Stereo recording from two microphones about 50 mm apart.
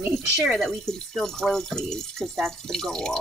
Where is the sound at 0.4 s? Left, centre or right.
Centre.